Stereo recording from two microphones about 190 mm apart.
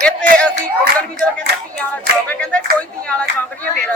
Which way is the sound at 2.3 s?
5° left (ahead or behind).